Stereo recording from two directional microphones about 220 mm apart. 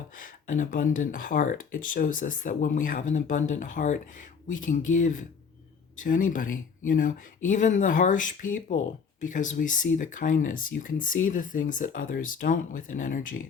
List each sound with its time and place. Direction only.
0.1 s speech: 40° left (ahead or behind)